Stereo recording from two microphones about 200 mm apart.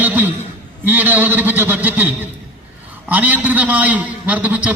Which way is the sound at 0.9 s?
10° right (ahead or behind).